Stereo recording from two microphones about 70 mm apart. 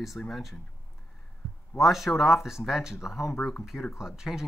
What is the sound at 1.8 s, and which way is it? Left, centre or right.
Speech, centre.